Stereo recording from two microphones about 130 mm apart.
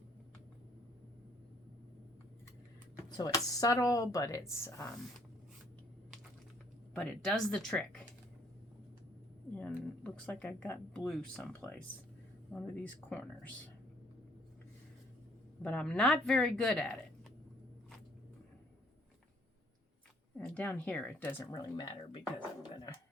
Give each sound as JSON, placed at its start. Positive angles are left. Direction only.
{"t": 3.1, "sound": "speech", "side_deg": 30}
{"t": 6.9, "sound": "speech", "side_deg": 5}
{"t": 9.6, "sound": "speech", "side_deg": 10}
{"t": 12.5, "sound": "speech", "side_deg": 10}
{"t": 15.6, "sound": "speech", "side_deg": 5}
{"t": 20.4, "sound": "speech", "side_deg": 10}
{"t": 21.5, "sound": "speech", "side_deg": 35}